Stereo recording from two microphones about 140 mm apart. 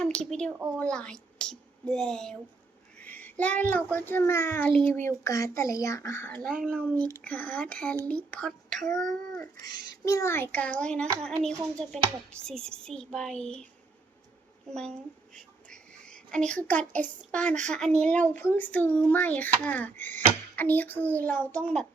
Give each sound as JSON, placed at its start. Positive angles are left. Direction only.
{"t": 0.0, "sound": "a woman's voice", "side_deg": 5}
{"t": 4.7, "sound": "a child's voice", "side_deg": 5}
{"t": 4.9, "sound": "a child's voice", "side_deg": 20}
{"t": 9.6, "sound": "a child's voice", "side_deg": 25}
{"t": 15.4, "sound": "whispering", "side_deg": 5}
{"t": 17.3, "sound": "a child's voice", "side_deg": 10}